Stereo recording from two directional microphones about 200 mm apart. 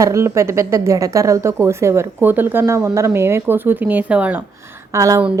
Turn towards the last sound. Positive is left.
turn(degrees=-15)  # may be behind; listen again after turning